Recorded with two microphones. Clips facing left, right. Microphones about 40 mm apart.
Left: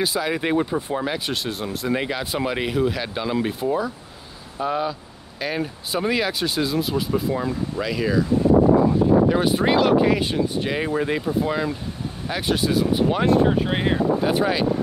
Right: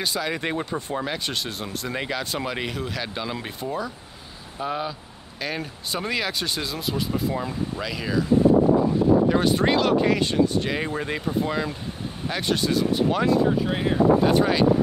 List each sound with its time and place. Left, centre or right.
0.0 s speech: centre
9.3 s speech: centre
13.3 s speech: left
14.2 s speech: centre